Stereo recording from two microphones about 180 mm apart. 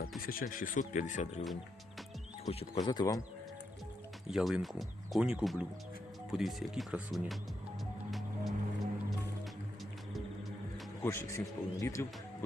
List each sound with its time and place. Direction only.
0.2 s speech: 50° left (ahead or behind)
2.7 s speech: 25° left (ahead or behind)
4.3 s speech: 5° right (ahead or behind)
8.1 s music: centre (ahead or behind)
11.0 s a man's voice: 15° left (ahead or behind)